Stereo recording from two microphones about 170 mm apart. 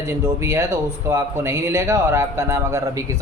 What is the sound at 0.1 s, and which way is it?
A man's voice, 15° right (ahead or behind).